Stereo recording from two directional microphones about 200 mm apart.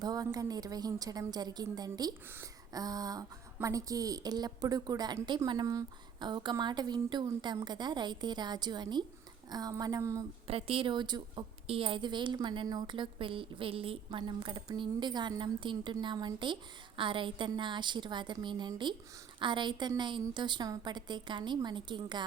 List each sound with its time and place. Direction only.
0.0 s speech: 20° right (ahead or behind)
10.4 s speech: 30° right (ahead or behind)